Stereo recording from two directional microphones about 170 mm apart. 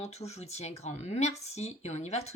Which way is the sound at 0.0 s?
40° left (ahead or behind).